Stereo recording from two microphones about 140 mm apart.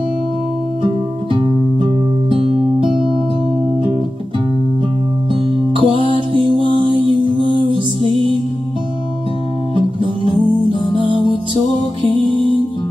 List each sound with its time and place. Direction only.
1.3 s music: 40° right (ahead or behind)
5.8 s music: 35° right (ahead or behind)
9.8 s music: 35° right (ahead or behind)